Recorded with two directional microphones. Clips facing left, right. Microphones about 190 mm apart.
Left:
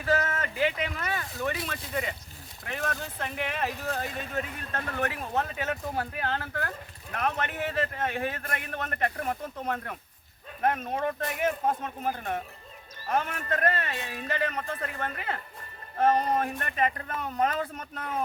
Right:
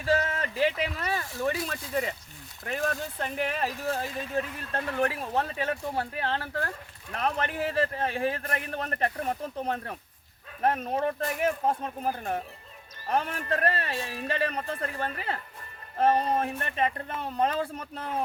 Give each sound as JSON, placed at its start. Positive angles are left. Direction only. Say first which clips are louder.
{"t": 0.0, "sound": "a man's voice", "louder": "right 1 dB", "side_deg": -30}
{"t": 14.0, "sound": "speech", "louder": "right 2 dB", "side_deg": 0}
{"t": 14.3, "sound": "a man's voice", "louder": "right 1 dB", "side_deg": -30}